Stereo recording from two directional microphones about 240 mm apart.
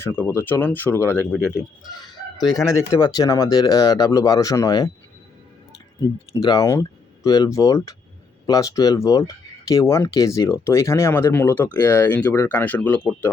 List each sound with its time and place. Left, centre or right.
0.0 s speech: centre
6.0 s speech: centre